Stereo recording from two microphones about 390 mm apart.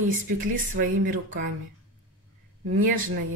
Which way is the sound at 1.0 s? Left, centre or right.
Right.